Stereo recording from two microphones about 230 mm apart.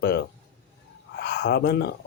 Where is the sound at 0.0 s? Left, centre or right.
Left.